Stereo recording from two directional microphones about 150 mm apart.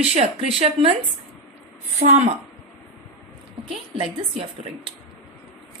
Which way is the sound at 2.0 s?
50° right (ahead or behind).